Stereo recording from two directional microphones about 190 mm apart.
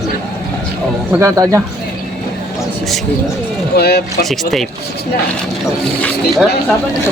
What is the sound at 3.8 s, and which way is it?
Speech, 55° left (ahead or behind).